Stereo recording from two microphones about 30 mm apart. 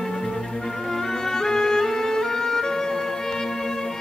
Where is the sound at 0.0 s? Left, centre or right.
Centre.